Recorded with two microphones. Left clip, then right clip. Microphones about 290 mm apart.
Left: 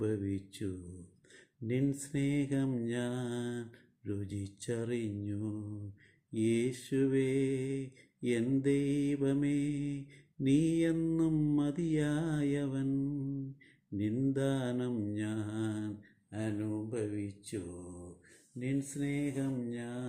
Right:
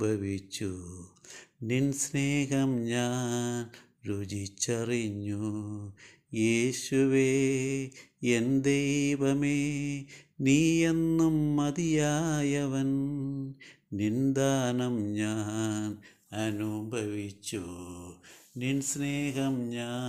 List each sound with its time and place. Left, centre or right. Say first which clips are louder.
0.0 s a sound: right 5 dB; centre
16.3 s speech: right 5 dB; right
18.6 s speech: right 5 dB; right